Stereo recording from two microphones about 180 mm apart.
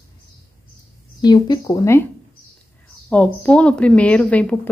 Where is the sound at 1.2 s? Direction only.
25° left (ahead or behind).